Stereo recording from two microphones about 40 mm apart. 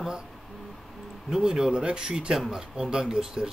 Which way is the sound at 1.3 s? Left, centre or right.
Centre.